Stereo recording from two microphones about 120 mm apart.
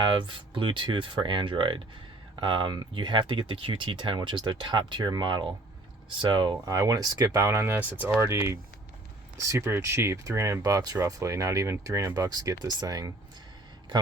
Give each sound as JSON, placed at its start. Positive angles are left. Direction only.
{"t": 0.0, "sound": "speech", "side_deg": -40}